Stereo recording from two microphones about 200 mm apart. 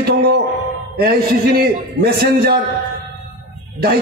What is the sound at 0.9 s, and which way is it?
A man's voice, 50° right (ahead or behind).